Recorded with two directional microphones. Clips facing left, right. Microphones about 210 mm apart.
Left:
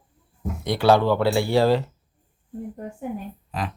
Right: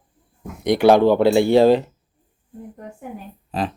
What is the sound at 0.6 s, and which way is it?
Speech, 15° right (ahead or behind).